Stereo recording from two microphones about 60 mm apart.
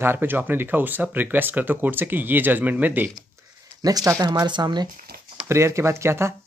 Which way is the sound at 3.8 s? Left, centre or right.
Right.